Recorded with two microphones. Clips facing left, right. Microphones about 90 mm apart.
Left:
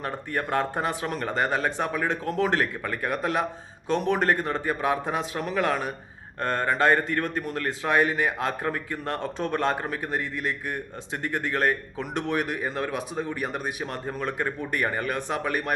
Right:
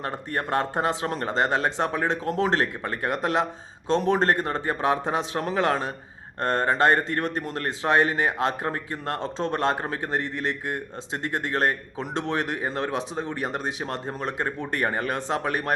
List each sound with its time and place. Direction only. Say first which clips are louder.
0.3 s speech: right 1 dB; 25° right (ahead or behind)